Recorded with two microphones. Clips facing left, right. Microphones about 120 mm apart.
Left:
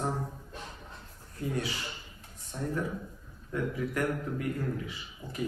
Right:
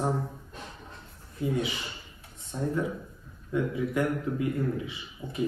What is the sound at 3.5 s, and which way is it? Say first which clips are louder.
A man's voice: right 4 dB; 20° right (ahead or behind).